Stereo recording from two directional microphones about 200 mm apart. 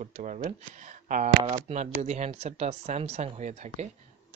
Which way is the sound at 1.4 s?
30° right (ahead or behind).